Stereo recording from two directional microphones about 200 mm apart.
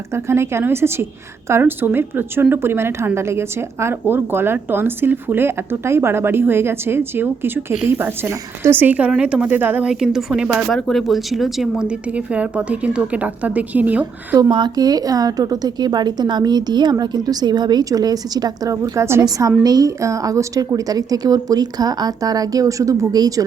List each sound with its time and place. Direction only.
0.1 s a woman's voice: 15° right (ahead or behind)